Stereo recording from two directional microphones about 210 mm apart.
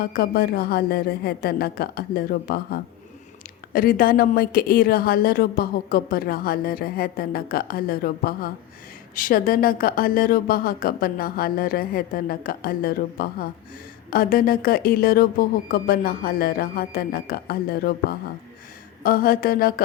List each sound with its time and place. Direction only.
0.0 s a woman's voice: 45° left (ahead or behind)